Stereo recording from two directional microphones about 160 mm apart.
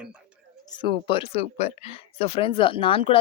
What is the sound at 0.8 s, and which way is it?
Speech, 30° left (ahead or behind).